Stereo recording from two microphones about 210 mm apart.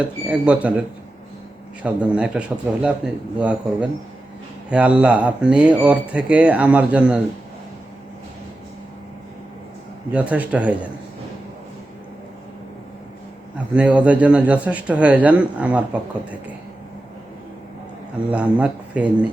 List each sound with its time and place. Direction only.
0.0 s speech: 5° right (ahead or behind)
10.1 s speech: 5° right (ahead or behind)
13.7 s speech: 5° right (ahead or behind)
18.3 s speech: 5° right (ahead or behind)